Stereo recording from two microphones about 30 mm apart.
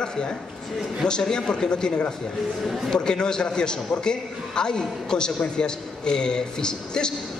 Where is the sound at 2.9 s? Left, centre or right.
Left.